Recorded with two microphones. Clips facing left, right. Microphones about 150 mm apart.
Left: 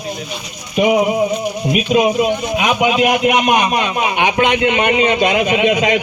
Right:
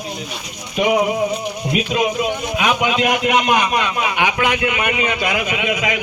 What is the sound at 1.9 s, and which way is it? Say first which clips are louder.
A man's voice: left 7 dB; 20° left (ahead or behind).